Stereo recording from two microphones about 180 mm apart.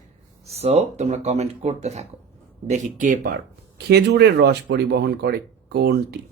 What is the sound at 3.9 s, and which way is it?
Speech, 65° right (ahead or behind).